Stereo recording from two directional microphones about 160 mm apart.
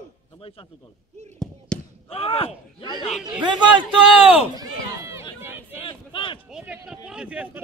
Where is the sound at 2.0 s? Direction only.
35° left (ahead or behind).